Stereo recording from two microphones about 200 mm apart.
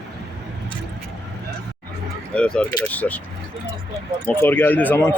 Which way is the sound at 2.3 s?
5° left (ahead or behind).